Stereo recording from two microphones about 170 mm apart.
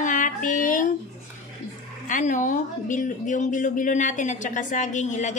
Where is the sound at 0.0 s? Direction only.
50° left (ahead or behind).